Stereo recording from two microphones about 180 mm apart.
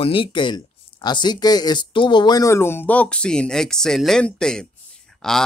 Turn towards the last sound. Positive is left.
turn(degrees=5)  # may be behind; listen again after turning